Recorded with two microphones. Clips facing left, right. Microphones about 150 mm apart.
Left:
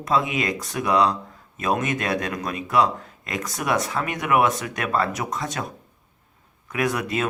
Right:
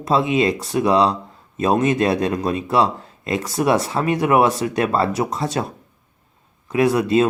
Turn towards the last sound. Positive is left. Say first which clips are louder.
# right 8 dB
turn(degrees=-30)  # may be behind; listen again after turning